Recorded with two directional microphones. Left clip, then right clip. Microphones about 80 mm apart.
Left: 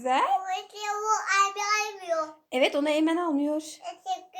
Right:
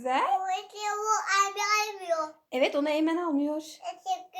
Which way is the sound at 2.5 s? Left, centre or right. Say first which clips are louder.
Left 2 dB; left.